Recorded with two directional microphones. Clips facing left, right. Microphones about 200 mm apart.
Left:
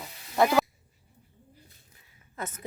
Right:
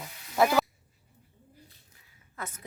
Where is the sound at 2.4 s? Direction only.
20° left (ahead or behind).